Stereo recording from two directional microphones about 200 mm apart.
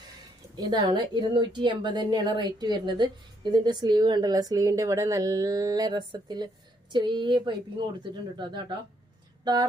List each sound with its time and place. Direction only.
0.5 s a woman's voice: 20° right (ahead or behind)
9.4 s speech: 20° right (ahead or behind)